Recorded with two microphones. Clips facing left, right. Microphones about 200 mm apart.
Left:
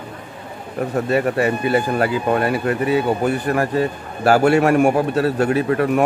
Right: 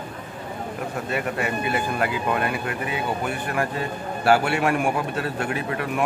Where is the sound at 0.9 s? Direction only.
40° left (ahead or behind).